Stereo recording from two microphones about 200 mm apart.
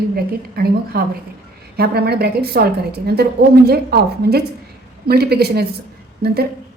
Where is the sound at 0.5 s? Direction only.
50° right (ahead or behind).